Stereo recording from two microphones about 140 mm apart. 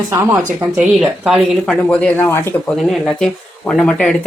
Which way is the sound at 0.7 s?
5° right (ahead or behind).